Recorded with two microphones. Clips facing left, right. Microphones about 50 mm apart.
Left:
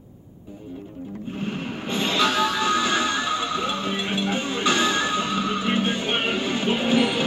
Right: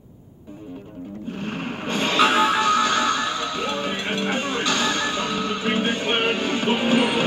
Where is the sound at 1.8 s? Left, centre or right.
Right.